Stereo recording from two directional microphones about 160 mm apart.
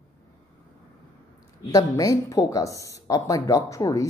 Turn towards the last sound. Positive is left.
turn(degrees=20)  # may be behind; listen again after turning